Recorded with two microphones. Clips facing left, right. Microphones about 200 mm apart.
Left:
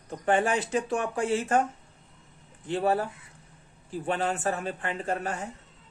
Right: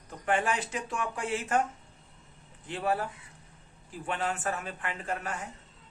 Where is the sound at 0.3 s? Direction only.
30° left (ahead or behind).